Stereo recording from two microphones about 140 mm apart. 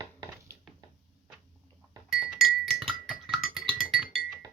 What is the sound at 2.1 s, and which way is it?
Music, 5° right (ahead or behind).